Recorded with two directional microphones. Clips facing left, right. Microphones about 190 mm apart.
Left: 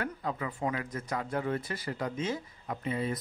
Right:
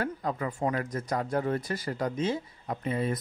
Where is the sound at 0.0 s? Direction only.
45° right (ahead or behind).